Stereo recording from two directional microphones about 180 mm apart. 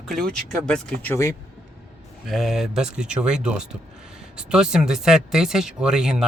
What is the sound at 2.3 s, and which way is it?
Speech, centre (ahead or behind).